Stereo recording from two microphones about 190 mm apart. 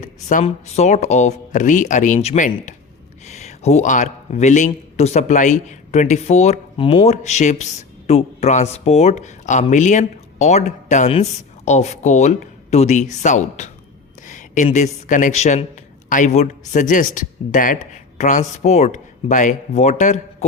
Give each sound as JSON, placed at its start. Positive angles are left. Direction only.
{"t": 0.0, "sound": "a man's voice", "side_deg": 45}